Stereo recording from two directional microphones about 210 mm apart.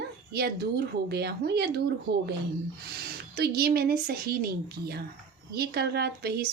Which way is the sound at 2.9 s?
50° right (ahead or behind).